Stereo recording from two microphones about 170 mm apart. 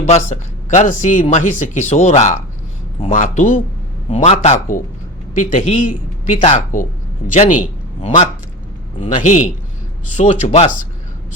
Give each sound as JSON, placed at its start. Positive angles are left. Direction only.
{"t": 0.0, "sound": "speech", "side_deg": 45}